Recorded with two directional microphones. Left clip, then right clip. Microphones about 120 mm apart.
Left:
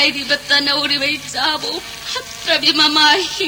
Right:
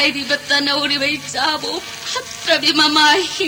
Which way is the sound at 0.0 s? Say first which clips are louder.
Left 1 dB; 35° right (ahead or behind).